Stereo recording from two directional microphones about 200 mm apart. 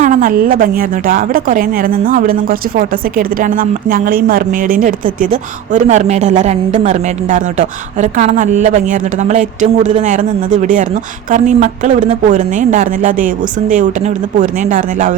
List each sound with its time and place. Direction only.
0.0 s a woman's voice: 40° right (ahead or behind)